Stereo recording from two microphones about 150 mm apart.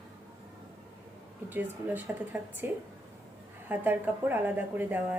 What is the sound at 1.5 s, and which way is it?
A woman's voice, 10° right (ahead or behind).